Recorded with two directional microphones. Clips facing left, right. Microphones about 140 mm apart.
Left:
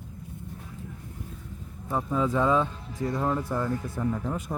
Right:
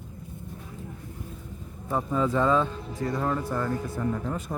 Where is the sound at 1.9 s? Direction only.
5° left (ahead or behind).